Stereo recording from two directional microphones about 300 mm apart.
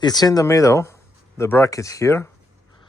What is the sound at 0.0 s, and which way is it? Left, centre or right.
Speech, centre.